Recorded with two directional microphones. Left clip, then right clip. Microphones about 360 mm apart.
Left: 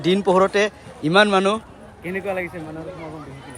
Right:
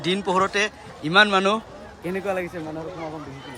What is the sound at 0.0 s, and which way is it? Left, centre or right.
A man's voice, centre.